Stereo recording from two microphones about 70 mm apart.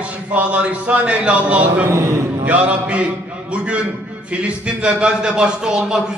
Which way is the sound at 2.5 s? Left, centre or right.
Centre.